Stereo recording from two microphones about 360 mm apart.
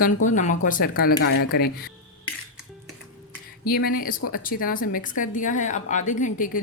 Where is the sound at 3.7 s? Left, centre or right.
Left.